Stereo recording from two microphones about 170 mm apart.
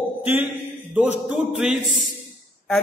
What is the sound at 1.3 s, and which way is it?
Speech, 5° right (ahead or behind).